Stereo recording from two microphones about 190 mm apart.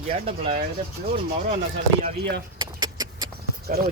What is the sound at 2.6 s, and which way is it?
Vehicle, 25° right (ahead or behind).